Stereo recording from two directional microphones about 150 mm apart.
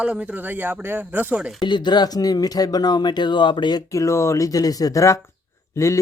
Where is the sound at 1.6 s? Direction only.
30° left (ahead or behind).